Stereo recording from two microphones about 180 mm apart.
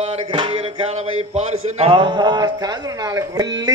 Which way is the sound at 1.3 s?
30° right (ahead or behind).